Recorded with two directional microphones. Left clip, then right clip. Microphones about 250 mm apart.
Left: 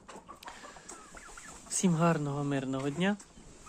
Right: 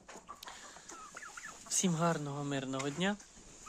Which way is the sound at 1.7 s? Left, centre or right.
Centre.